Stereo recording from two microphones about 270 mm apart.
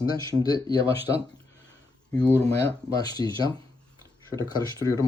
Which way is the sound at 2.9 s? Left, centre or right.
Centre.